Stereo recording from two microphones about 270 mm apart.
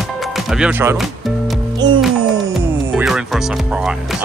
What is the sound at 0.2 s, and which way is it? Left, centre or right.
Music, centre.